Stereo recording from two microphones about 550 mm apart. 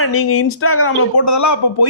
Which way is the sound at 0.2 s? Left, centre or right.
Left.